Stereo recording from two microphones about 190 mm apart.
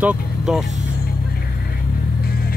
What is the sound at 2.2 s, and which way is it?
Music, 50° left (ahead or behind).